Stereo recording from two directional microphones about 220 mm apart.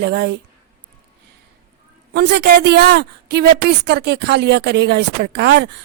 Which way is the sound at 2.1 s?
50° right (ahead or behind).